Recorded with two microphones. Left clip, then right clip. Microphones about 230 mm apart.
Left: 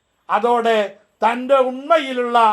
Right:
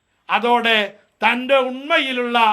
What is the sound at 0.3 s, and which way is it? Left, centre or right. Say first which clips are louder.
A man's voice: even; right.